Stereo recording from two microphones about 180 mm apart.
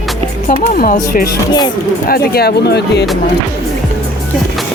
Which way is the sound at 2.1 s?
60° left (ahead or behind).